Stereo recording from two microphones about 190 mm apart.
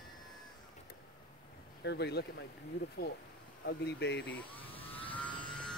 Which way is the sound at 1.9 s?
60° left (ahead or behind).